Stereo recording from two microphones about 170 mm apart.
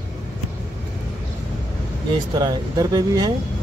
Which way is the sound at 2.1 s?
25° right (ahead or behind).